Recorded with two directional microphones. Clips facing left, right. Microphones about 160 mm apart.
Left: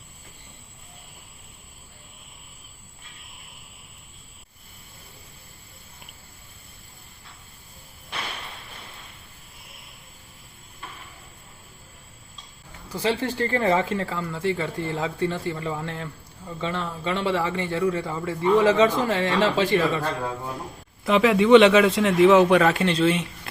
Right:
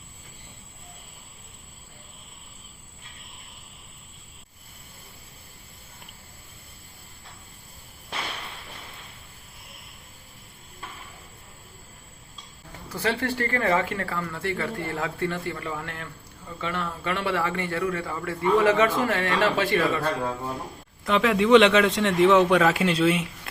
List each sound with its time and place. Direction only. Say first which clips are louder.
12.9 s speech: left 2 dB; 15° left (ahead or behind)
21.0 s a man's voice: left 3 dB; 5° left (ahead or behind)